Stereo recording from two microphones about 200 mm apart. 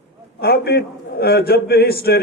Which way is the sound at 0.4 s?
50° left (ahead or behind).